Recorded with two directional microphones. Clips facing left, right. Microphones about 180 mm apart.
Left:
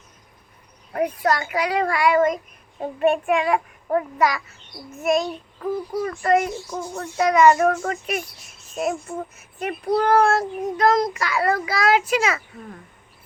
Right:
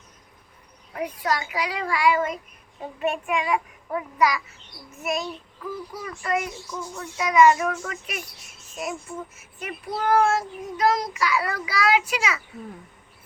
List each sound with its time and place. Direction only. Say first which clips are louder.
0.9 s a child's voice: left 5 dB; 55° left (ahead or behind)